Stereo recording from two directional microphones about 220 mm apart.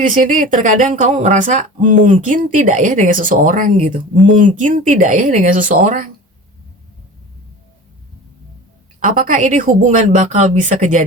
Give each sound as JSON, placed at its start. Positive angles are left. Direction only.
{"t": 0.0, "sound": "speech", "side_deg": -35}
{"t": 9.0, "sound": "speech", "side_deg": -40}